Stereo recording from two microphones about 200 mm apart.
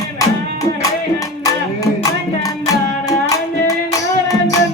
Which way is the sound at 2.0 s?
15° left (ahead or behind).